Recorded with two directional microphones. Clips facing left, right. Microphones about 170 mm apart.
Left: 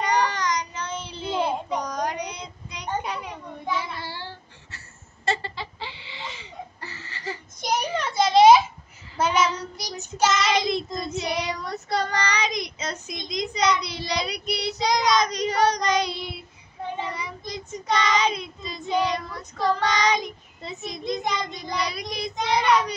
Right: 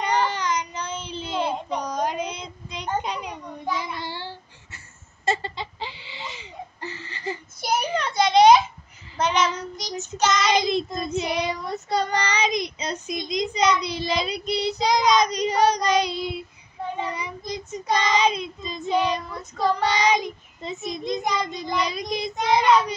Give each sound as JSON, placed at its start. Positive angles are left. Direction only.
{"t": 0.0, "sound": "child singing", "side_deg": -20}
{"t": 1.1, "sound": "child singing", "side_deg": 15}
{"t": 1.8, "sound": "child singing", "side_deg": -20}
{"t": 4.7, "sound": "a sound", "side_deg": -20}
{"t": 7.6, "sound": "a sound", "side_deg": 0}
{"t": 9.2, "sound": "child singing", "side_deg": 5}
{"t": 10.5, "sound": "child singing", "side_deg": -20}